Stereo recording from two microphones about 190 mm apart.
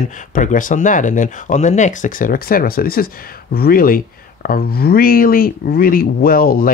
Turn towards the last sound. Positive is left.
turn(degrees=50)  # may be behind; listen again after turning